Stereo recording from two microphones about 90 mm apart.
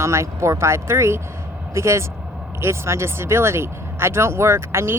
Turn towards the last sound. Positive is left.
turn(degrees=-30)  # may be behind; listen again after turning